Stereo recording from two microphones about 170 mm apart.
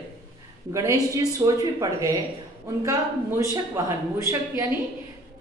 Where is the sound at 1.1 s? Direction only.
20° right (ahead or behind).